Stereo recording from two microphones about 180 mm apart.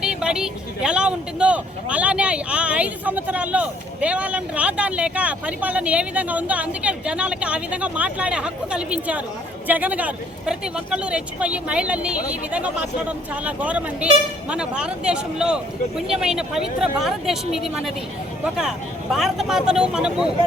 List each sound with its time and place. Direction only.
0.0 s a woman's voice: 5° right (ahead or behind)
19.1 s a woman's voice: centre (ahead or behind)